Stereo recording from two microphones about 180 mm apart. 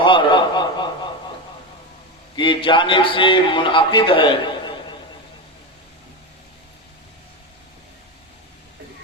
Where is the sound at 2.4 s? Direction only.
30° left (ahead or behind).